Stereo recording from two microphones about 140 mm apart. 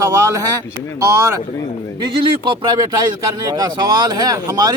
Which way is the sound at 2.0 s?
35° right (ahead or behind).